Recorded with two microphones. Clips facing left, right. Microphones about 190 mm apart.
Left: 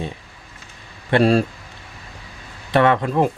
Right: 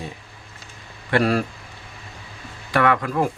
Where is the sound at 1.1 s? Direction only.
25° left (ahead or behind).